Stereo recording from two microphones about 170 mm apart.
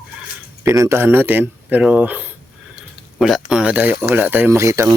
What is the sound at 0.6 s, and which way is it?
Speech, 15° right (ahead or behind).